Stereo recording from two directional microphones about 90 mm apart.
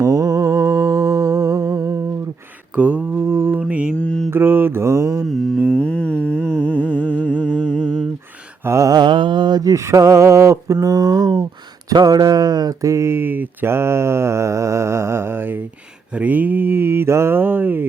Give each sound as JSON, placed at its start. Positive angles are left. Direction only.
{"t": 0.0, "sound": "humming", "side_deg": -40}
{"t": 2.7, "sound": "mantra", "side_deg": -15}
{"t": 3.2, "sound": "mantra", "side_deg": -25}
{"t": 3.6, "sound": "mantra", "side_deg": -15}
{"t": 3.9, "sound": "mantra", "side_deg": 10}
{"t": 4.3, "sound": "mantra", "side_deg": -25}
{"t": 5.7, "sound": "music", "side_deg": 15}
{"t": 6.5, "sound": "humming", "side_deg": 15}
{"t": 8.6, "sound": "speech", "side_deg": -30}
{"t": 8.9, "sound": "mantra", "side_deg": -55}
{"t": 11.9, "sound": "speech", "side_deg": -45}
{"t": 16.1, "sound": "mantra", "side_deg": -20}